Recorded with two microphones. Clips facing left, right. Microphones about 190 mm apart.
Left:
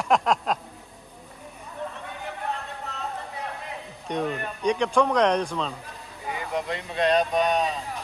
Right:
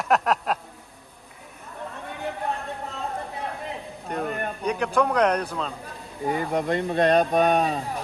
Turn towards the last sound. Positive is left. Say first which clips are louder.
# right 3 dB
turn(degrees=-55)  # may be behind; listen again after turning